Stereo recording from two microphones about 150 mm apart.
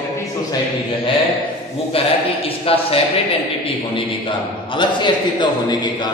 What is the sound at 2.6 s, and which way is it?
Speech, 40° left (ahead or behind).